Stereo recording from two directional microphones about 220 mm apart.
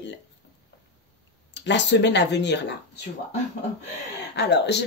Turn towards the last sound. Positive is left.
turn(degrees=50)  # may be behind; listen again after turning